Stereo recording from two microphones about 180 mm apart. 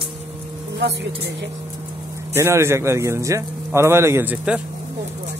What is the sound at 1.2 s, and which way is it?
Speech, 80° right.